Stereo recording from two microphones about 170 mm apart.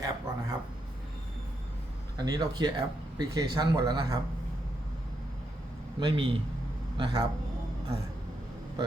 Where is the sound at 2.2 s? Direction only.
25° right (ahead or behind).